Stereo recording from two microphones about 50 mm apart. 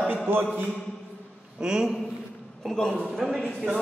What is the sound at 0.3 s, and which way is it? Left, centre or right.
Speech, right.